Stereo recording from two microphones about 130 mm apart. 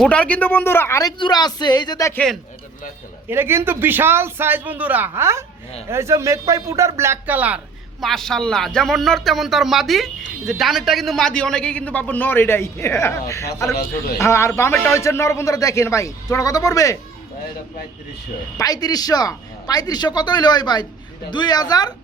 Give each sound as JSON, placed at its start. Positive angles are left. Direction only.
{"t": 0.0, "sound": "a man's voice", "side_deg": 10}
{"t": 2.1, "sound": "speech", "side_deg": 5}
{"t": 3.2, "sound": "a man's voice", "side_deg": -15}
{"t": 8.0, "sound": "a man's voice", "side_deg": 5}
{"t": 18.5, "sound": "a man's voice", "side_deg": 30}